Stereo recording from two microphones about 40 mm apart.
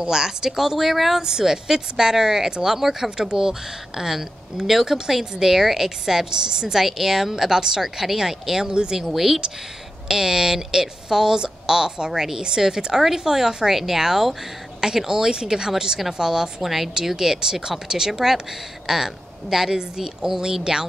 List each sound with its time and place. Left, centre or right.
0.0 s speech: centre
9.1 s speech: centre
16.6 s speech: centre